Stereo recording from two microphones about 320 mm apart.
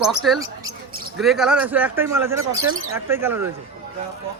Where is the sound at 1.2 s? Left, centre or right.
Centre.